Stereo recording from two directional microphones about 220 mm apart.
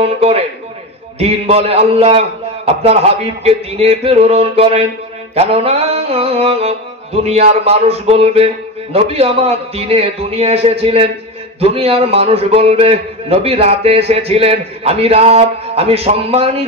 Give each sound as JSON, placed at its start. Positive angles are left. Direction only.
{"t": 0.0, "sound": "a man's voice", "side_deg": -25}